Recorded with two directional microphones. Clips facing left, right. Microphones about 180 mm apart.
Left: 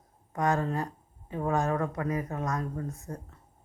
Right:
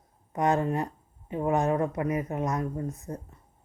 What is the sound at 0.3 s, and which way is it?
Speech, 20° right (ahead or behind).